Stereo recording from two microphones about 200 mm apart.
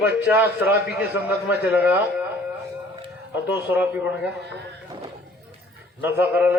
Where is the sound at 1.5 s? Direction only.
10° right (ahead or behind).